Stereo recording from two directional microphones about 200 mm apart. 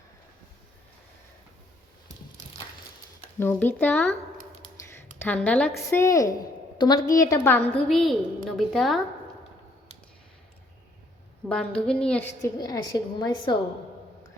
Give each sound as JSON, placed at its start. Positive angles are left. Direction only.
{"t": 3.3, "sound": "a woman's voice", "side_deg": 10}
{"t": 5.2, "sound": "a woman's voice", "side_deg": 5}
{"t": 6.4, "sound": "a sound", "side_deg": 20}
{"t": 7.2, "sound": "a woman's voice", "side_deg": 15}
{"t": 11.4, "sound": "a woman's voice", "side_deg": 5}
{"t": 12.5, "sound": "a woman's voice", "side_deg": 20}